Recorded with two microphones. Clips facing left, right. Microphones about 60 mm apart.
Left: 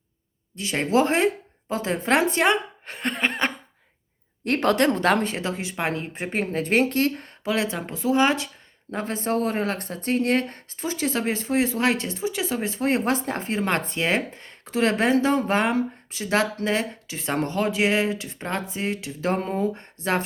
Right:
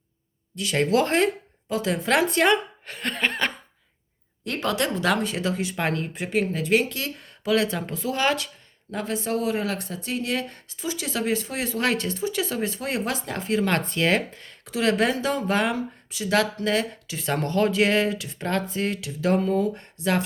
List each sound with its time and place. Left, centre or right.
0.5 s speech: left
1.6 s speech: left
4.4 s speech: left
5.4 s speech: left
6.1 s speech: left
7.4 s speech: left
8.9 s speech: left